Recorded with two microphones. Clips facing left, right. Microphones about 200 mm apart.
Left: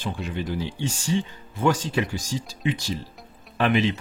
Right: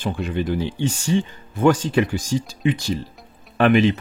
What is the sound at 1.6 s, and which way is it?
Speech, 55° right (ahead or behind).